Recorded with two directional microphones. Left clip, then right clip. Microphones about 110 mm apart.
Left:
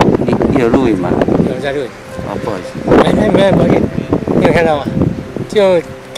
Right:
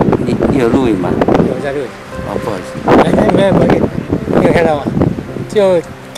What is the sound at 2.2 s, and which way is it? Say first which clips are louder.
Speech: right 1 dB; 10° right (ahead or behind).